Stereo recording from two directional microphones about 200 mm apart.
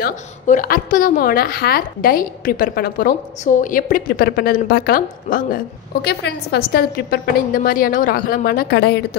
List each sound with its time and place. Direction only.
0.0 s a woman's voice: 45° left (ahead or behind)
6.0 s a woman's voice: 55° left (ahead or behind)